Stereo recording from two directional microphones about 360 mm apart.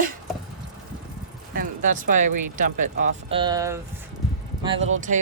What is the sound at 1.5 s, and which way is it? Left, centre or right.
Speech, right.